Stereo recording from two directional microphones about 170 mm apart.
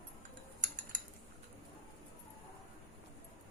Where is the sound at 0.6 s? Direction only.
50° right (ahead or behind).